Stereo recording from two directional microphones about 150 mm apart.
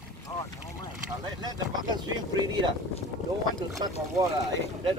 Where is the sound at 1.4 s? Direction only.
30° right (ahead or behind).